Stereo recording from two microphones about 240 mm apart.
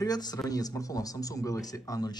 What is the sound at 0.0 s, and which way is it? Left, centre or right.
Speech, centre.